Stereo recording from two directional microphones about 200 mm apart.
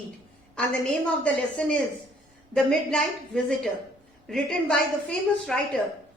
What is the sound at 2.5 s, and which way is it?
A woman's voice, 5° left (ahead or behind).